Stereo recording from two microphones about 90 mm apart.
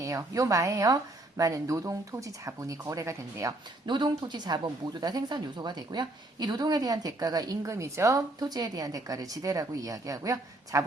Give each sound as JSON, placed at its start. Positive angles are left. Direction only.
{"t": 0.0, "sound": "speech", "side_deg": -35}
{"t": 3.8, "sound": "speech", "side_deg": -60}